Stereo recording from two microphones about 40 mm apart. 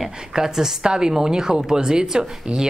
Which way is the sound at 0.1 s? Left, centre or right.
Centre.